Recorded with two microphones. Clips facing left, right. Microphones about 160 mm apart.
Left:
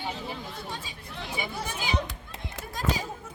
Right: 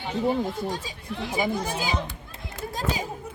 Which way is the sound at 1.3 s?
40° right (ahead or behind).